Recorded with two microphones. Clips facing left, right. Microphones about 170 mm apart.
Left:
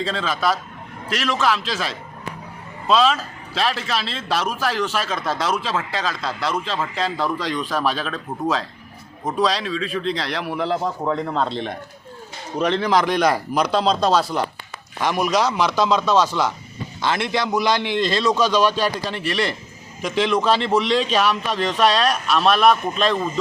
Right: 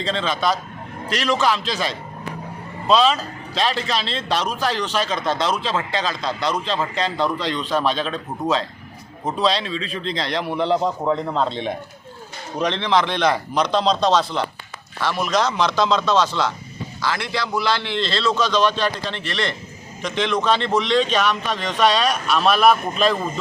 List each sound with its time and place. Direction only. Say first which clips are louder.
0.0 s a man's voice: right 1 dB; 5° left (ahead or behind)
10.1 s a man's voice: right 5 dB; 5° left (ahead or behind)